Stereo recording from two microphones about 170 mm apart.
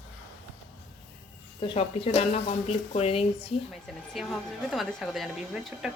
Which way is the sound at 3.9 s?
Centre (ahead or behind).